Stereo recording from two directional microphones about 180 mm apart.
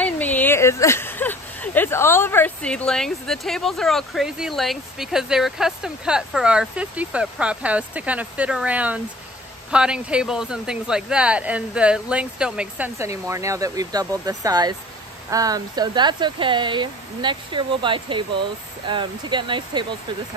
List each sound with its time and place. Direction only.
0.0 s speech: 10° left (ahead or behind); by 20.0 s 25° right (ahead or behind)